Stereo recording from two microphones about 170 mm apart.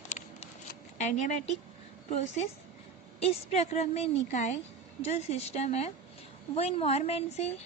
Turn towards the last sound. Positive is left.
turn(degrees=40)  # may be behind; listen again after turning